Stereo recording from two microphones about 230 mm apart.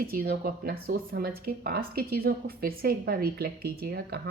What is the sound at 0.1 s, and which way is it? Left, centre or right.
Speech, right.